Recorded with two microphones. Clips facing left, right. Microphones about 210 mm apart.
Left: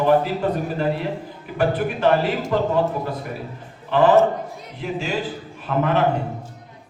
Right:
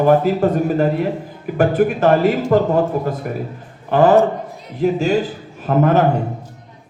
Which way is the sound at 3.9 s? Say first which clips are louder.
Right 3 dB; 45° right (ahead or behind).